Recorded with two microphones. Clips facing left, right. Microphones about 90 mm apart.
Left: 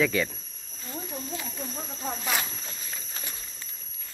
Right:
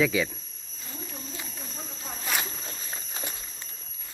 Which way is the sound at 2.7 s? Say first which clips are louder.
Right 2 dB; 25° right (ahead or behind).